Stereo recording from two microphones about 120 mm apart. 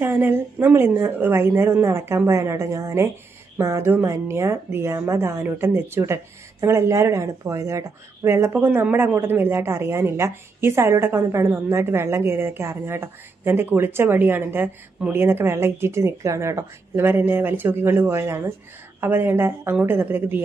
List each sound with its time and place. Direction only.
0.0 s a woman's voice: 20° right (ahead or behind)